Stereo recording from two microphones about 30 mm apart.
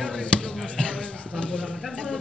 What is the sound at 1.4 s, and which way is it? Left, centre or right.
Speech, left.